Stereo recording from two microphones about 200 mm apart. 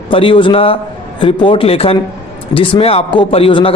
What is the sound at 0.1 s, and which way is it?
Speech, 25° left (ahead or behind).